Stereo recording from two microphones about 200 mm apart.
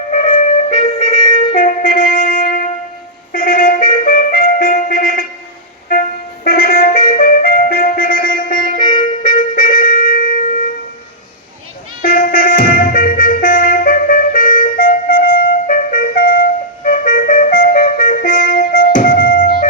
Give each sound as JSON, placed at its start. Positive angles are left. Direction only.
{"t": 0.1, "sound": "music", "side_deg": 40}
{"t": 1.5, "sound": "wind instrument", "side_deg": 40}
{"t": 3.3, "sound": "music", "side_deg": 45}
{"t": 8.8, "sound": "music", "side_deg": 25}
{"t": 9.2, "sound": "wind instrument", "side_deg": 45}
{"t": 12.0, "sound": "music", "side_deg": 45}